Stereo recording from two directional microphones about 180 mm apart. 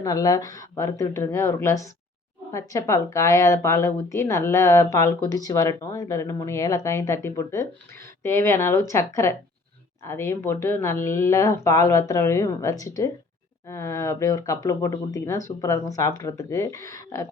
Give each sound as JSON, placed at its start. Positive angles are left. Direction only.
{"t": 0.0, "sound": "a woman's voice", "side_deg": 20}